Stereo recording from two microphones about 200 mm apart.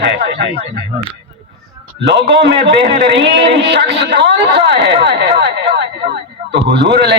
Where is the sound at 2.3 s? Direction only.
60° right (ahead or behind).